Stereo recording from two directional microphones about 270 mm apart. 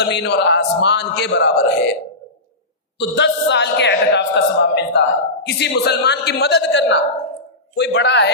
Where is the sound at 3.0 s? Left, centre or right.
Left.